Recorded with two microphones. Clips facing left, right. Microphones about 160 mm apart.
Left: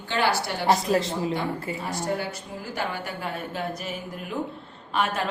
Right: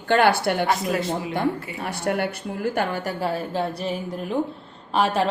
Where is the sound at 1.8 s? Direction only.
65° right (ahead or behind); by 4.4 s 30° right (ahead or behind).